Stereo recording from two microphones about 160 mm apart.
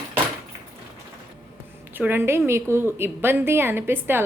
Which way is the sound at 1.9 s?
10° right (ahead or behind).